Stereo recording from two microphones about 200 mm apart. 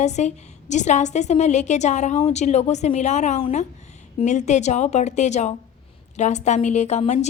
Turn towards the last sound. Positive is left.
turn(degrees=35)  # may be behind; listen again after turning